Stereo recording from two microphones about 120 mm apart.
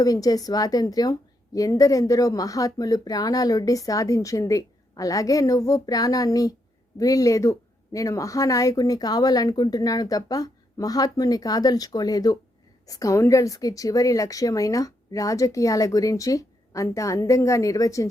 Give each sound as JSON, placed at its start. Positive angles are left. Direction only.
{"t": 0.0, "sound": "a woman's voice", "side_deg": 30}